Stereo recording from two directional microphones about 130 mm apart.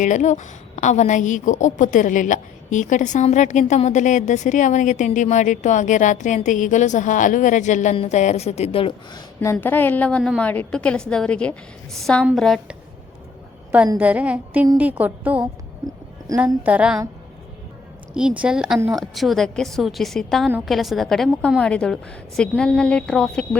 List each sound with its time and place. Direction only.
0.0 s a woman's voice: 70° left (ahead or behind); by 9.2 s 45° left (ahead or behind)
9.4 s a woman's voice: 20° left (ahead or behind)
13.7 s a woman's voice: 10° right (ahead or behind)
14.0 s a sound: 10° right (ahead or behind)
16.6 s a sound: 10° right (ahead or behind)
18.1 s a woman's voice: 5° right (ahead or behind)